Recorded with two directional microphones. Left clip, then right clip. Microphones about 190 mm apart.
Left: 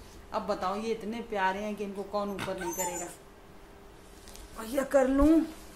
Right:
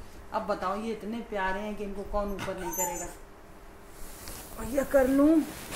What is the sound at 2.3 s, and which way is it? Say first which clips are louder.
Speech: even; 10° left (ahead or behind).